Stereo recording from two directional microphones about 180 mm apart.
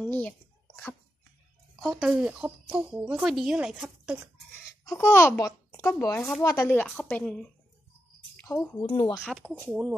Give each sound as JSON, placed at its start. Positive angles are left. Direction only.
{"t": 0.0, "sound": "speech", "side_deg": 5}
{"t": 1.8, "sound": "speech", "side_deg": 0}
{"t": 4.8, "sound": "a child's voice", "side_deg": 10}
{"t": 6.4, "sound": "speech", "side_deg": 20}
{"t": 6.7, "sound": "speech", "side_deg": 5}
{"t": 8.8, "sound": "speech", "side_deg": 35}
{"t": 9.2, "sound": "speech", "side_deg": 0}